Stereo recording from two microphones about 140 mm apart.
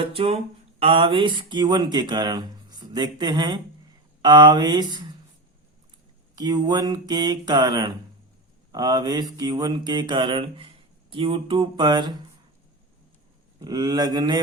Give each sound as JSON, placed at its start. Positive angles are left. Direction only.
{"t": 0.0, "sound": "a sound", "side_deg": -45}
{"t": 0.8, "sound": "speech", "side_deg": -40}
{"t": 6.3, "sound": "speech", "side_deg": -30}
{"t": 13.6, "sound": "speech", "side_deg": -25}